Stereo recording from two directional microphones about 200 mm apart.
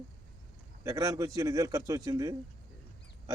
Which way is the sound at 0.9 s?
15° right (ahead or behind).